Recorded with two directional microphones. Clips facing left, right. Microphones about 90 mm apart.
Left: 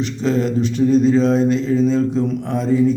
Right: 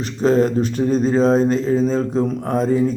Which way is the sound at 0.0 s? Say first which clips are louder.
Right 3 dB; 40° right (ahead or behind).